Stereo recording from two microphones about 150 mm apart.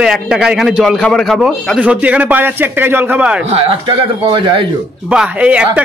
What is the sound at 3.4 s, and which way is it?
Speech, 45° right (ahead or behind).